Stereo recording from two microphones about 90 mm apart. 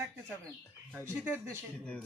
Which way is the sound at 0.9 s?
25° right (ahead or behind).